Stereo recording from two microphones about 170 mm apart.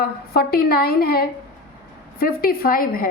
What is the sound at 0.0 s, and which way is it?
A woman's voice, 60° left (ahead or behind).